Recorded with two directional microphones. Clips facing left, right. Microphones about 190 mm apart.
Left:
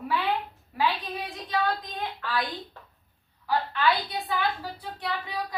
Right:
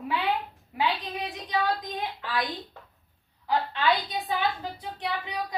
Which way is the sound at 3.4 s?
20° right (ahead or behind).